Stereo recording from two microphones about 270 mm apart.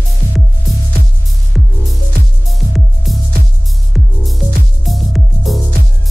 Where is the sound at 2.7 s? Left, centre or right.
Centre.